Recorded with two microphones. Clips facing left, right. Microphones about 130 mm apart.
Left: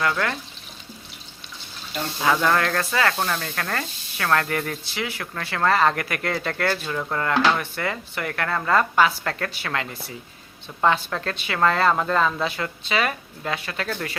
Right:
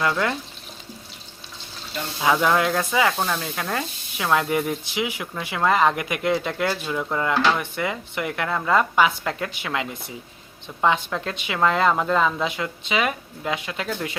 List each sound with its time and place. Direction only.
0.0 s speech: 20° right (ahead or behind)
2.2 s speech: 5° right (ahead or behind)